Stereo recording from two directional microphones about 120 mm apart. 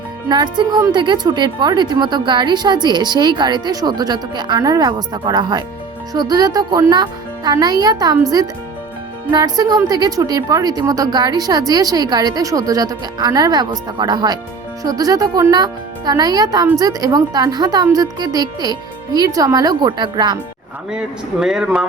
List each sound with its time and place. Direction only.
0.3 s a woman's voice: 35° right (ahead or behind)
20.9 s speech: 5° right (ahead or behind)